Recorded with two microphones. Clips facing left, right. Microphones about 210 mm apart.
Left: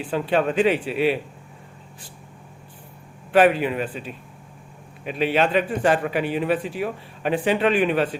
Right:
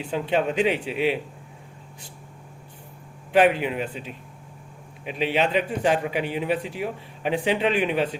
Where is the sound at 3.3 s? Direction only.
15° right (ahead or behind).